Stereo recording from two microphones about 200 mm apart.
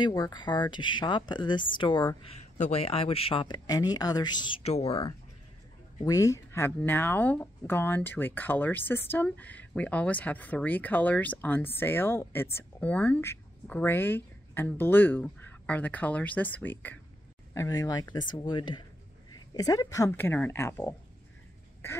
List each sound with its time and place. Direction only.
0.0 s speech: 20° left (ahead or behind)
2.2 s speech: 35° left (ahead or behind)
5.9 s speech: 15° left (ahead or behind)